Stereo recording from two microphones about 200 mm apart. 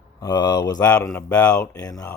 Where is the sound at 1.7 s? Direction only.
15° left (ahead or behind).